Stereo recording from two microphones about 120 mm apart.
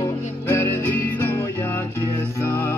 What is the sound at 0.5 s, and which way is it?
Music, 20° left (ahead or behind).